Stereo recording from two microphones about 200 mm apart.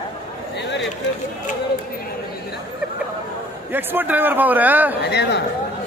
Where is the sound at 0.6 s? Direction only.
60° left (ahead or behind).